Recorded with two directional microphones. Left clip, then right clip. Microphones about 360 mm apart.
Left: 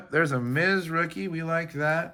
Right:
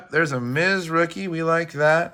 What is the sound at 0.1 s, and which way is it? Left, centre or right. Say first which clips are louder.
Speech: right 3 dB; centre.